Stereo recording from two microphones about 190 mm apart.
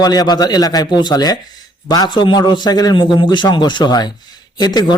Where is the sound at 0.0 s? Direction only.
20° left (ahead or behind).